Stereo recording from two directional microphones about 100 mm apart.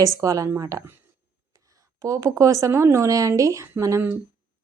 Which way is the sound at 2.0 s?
30° right (ahead or behind).